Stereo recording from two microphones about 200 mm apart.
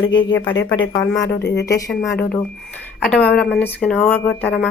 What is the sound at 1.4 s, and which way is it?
Speech, 55° left (ahead or behind).